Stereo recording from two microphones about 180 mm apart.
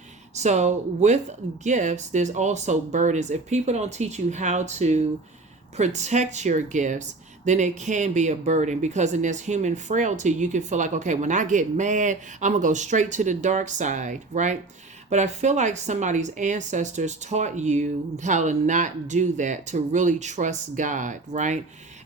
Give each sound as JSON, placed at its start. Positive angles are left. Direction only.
{"t": 0.3, "sound": "a woman's voice", "side_deg": -40}